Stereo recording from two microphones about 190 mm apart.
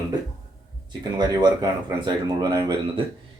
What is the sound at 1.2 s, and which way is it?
Speech, 20° right (ahead or behind).